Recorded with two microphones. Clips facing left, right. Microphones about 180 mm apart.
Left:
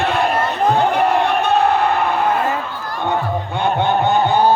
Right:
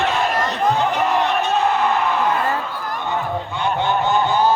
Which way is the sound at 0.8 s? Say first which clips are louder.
Left 3 dB; 60° left (ahead or behind).